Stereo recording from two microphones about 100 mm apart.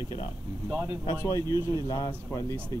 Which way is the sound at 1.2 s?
35° left (ahead or behind).